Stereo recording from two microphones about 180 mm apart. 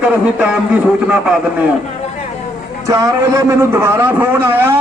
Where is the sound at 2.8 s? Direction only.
20° right (ahead or behind).